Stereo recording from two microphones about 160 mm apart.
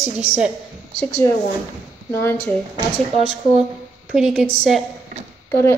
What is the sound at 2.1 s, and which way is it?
Speech, 15° left (ahead or behind).